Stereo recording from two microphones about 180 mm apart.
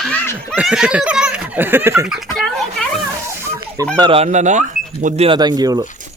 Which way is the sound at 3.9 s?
25° right (ahead or behind).